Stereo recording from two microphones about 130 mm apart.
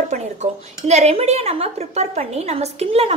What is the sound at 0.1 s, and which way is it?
A woman's voice, 60° right (ahead or behind).